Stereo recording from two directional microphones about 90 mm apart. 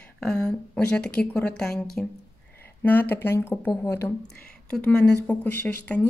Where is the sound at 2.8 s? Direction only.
20° left (ahead or behind).